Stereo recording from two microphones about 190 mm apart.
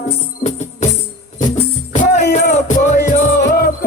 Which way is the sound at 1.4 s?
40° left (ahead or behind).